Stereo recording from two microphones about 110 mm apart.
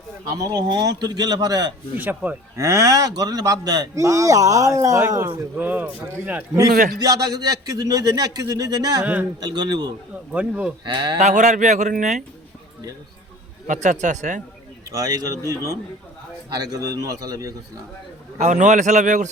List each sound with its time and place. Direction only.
0.3 s speech: 35° right (ahead or behind)
2.0 s speech: 15° right (ahead or behind)
2.6 s speech: 30° right (ahead or behind)
5.5 s speech: 15° right (ahead or behind)
6.6 s speech: 35° right (ahead or behind)
10.3 s speech: 10° right (ahead or behind)
10.8 s speech: 45° right (ahead or behind)
11.2 s speech: 90° right
13.8 s speech: 90° right
14.9 s speech: 30° right (ahead or behind)
18.3 s speech: 90° right